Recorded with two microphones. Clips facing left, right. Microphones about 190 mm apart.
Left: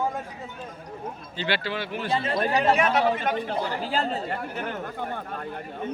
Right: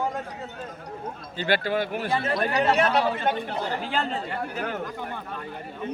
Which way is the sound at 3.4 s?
35° left (ahead or behind).